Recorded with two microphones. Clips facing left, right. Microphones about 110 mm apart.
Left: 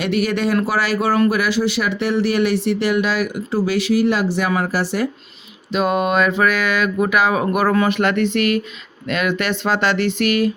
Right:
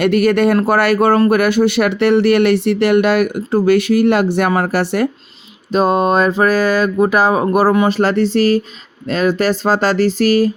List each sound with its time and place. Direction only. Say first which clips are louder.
0.0 s speech: right 7 dB; 55° right (ahead or behind)
5.7 s mantra: right 4 dB; 35° right (ahead or behind)